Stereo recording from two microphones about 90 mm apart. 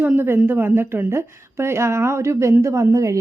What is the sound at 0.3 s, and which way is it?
A woman's voice, 25° right (ahead or behind).